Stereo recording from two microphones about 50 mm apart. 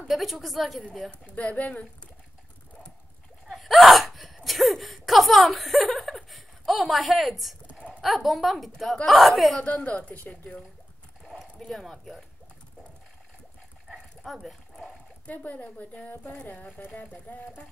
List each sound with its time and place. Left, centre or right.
0.1 s a woman's voice: centre
1.2 s a woman's voice: left
3.4 s hiccup: centre
8.0 s a woman's voice: centre
9.6 s a woman's voice: left
11.2 s speech: centre
13.8 s dog: centre
15.2 s a woman's voice: left